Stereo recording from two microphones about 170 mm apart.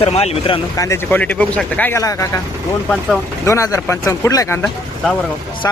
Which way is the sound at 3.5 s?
15° left (ahead or behind).